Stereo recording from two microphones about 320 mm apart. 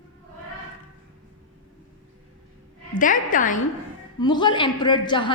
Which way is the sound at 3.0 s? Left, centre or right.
Left.